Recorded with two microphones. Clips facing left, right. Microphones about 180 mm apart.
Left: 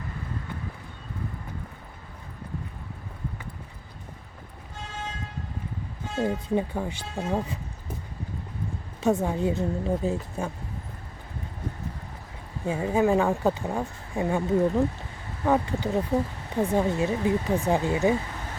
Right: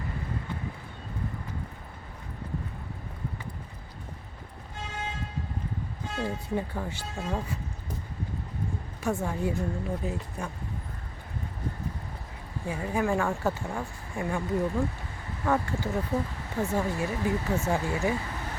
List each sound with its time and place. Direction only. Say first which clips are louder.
6.1 s speech: left 5 dB; 20° left (ahead or behind)
9.0 s speech: left 5 dB; 20° left (ahead or behind)
12.6 s speech: left 6 dB; 25° left (ahead or behind)